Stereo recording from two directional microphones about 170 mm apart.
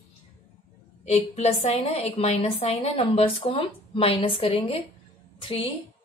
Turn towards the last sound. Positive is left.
turn(degrees=30)  # may be behind; listen again after turning